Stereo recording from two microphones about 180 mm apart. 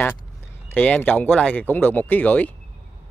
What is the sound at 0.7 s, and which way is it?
Speech, 10° left (ahead or behind).